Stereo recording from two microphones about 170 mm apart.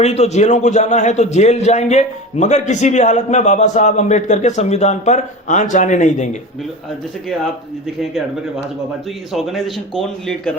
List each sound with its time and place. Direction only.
0.0 s a man's voice: 40° left (ahead or behind)
9.3 s speech: centre (ahead or behind)